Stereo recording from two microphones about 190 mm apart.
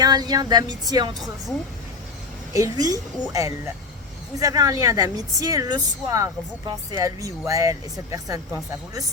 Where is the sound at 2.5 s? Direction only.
20° right (ahead or behind).